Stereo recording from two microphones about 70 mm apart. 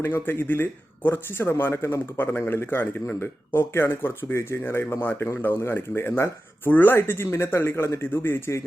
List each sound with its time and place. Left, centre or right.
0.0 s speech: left